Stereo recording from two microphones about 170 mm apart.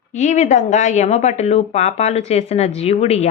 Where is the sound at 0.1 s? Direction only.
45° left (ahead or behind).